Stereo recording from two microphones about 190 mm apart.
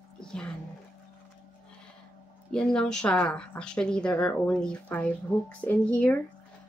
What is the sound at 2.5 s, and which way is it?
Speech, 5° left (ahead or behind).